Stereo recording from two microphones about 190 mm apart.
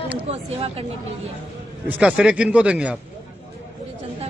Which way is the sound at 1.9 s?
5° right (ahead or behind).